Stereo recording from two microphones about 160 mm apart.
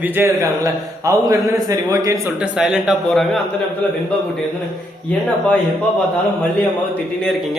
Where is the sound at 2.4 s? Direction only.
5° right (ahead or behind).